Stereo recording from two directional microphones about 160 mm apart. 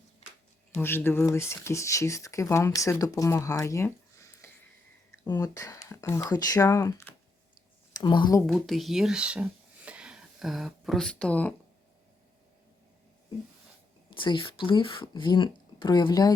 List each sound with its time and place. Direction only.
0.8 s speech: 15° left (ahead or behind)
7.9 s speech: 30° left (ahead or behind)
8.4 s speech: centre (ahead or behind)
14.1 s speech: 30° left (ahead or behind)